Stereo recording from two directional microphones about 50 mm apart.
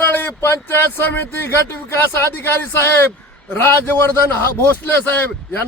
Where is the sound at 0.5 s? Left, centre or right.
Left.